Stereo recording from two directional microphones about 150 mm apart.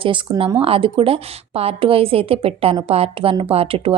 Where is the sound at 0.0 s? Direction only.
35° right (ahead or behind).